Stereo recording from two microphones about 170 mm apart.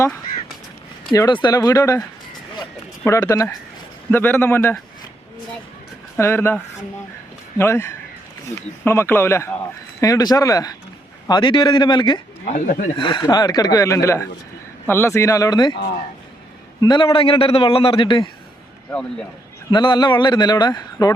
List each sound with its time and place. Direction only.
1.1 s a man's voice: 25° left (ahead or behind)
6.1 s a man's voice: 15° left (ahead or behind)
7.6 s a man's voice: 15° left (ahead or behind)
12.5 s speech: 55° left (ahead or behind)
13.0 s speech: 30° left (ahead or behind)
16.8 s a man's voice: 25° left (ahead or behind)
19.7 s speech: 25° left (ahead or behind)